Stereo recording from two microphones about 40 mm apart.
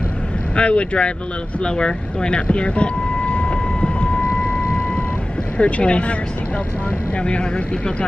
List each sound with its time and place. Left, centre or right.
0.6 s speech: left
1.6 s vehicle: left
5.6 s speech: left
7.2 s speech: left